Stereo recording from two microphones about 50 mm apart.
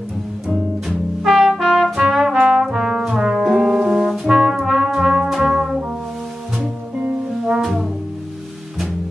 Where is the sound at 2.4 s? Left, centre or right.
Centre.